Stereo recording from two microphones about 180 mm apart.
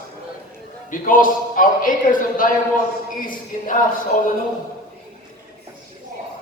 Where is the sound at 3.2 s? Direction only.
50° left (ahead or behind).